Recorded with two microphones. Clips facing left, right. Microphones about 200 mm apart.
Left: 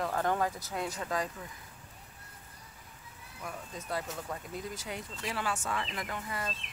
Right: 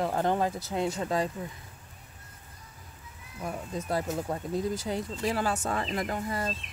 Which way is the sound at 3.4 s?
35° right (ahead or behind).